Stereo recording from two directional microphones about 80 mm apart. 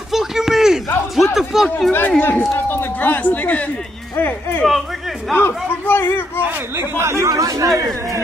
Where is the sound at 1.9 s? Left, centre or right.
Left.